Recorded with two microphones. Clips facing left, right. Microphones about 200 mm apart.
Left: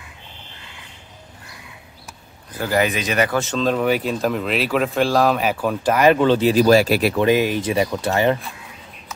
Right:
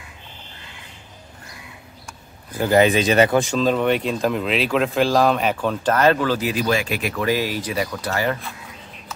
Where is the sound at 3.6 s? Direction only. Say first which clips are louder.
Left 3 dB; centre (ahead or behind); by 8.4 s 25° left (ahead or behind).